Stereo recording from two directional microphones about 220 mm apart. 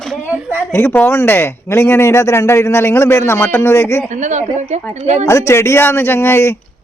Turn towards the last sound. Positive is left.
turn(degrees=10)  # may be behind; listen again after turning